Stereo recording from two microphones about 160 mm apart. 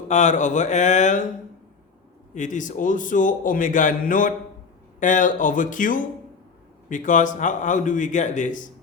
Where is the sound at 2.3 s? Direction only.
50° left (ahead or behind).